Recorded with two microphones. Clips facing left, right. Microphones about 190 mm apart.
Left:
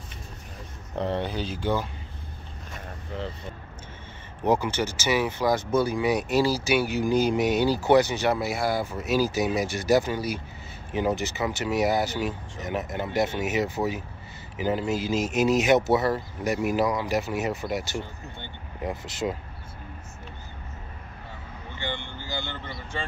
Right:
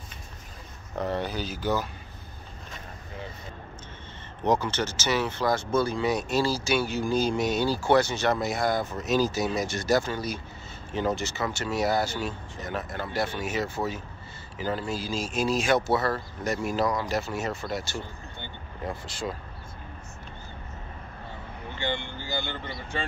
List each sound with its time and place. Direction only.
0.9 s speech: 25° left (ahead or behind)
4.4 s speech: 10° left (ahead or behind)